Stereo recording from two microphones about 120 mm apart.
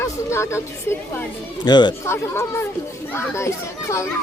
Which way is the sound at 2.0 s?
20° left (ahead or behind).